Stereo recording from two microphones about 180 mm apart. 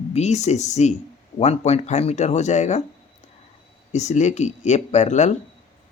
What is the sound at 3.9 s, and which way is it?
Speech, 40° left (ahead or behind).